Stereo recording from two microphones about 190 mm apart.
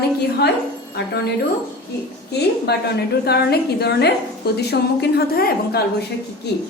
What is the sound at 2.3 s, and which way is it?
A woman's voice, 60° left (ahead or behind).